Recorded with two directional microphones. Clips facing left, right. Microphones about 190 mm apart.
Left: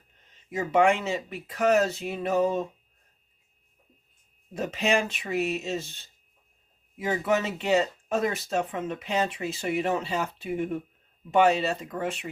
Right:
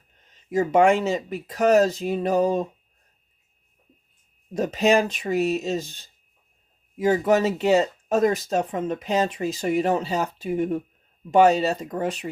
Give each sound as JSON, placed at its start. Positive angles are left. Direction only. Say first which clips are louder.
{"t": 0.5, "sound": "speech", "louder": "right 5 dB", "side_deg": -40}
{"t": 4.5, "sound": "speech", "louder": "right 6 dB", "side_deg": -40}